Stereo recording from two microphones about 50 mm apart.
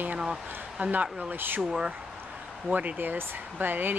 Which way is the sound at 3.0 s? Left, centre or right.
Right.